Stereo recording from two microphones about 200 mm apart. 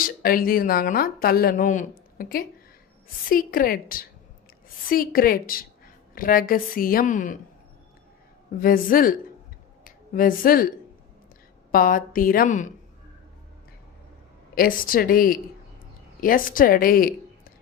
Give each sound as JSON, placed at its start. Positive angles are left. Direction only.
{"t": 0.2, "sound": "a woman's voice", "side_deg": 45}
{"t": 8.5, "sound": "a woman's voice", "side_deg": 45}
{"t": 14.5, "sound": "a woman's voice", "side_deg": 45}